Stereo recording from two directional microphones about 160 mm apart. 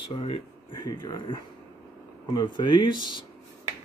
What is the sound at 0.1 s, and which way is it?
Speech, 35° left (ahead or behind).